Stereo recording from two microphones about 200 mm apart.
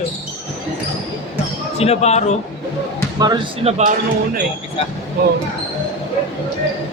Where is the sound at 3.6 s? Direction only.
30° right (ahead or behind).